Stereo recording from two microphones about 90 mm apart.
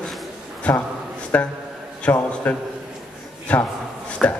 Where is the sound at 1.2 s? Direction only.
15° left (ahead or behind).